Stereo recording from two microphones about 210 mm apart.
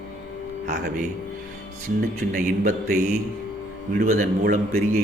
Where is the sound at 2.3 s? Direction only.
40° right (ahead or behind).